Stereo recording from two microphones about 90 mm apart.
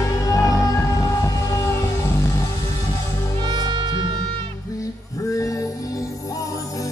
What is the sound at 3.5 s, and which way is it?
Music, 55° right (ahead or behind).